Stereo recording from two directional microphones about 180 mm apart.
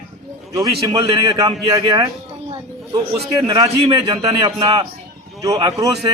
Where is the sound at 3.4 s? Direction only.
20° right (ahead or behind).